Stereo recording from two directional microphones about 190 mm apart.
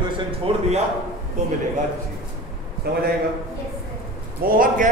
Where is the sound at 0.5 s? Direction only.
30° right (ahead or behind).